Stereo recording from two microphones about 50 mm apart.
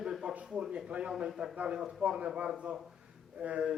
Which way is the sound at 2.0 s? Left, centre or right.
Right.